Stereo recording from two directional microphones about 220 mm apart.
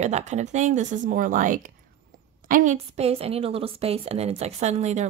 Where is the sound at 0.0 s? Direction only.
30° right (ahead or behind).